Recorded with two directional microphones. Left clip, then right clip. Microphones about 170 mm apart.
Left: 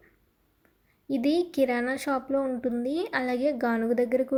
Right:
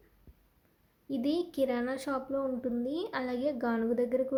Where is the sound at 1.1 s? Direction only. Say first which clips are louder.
Left 6 dB; 25° left (ahead or behind).